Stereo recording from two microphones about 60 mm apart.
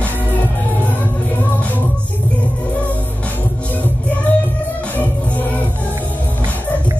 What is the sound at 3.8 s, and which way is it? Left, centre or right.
Music, left.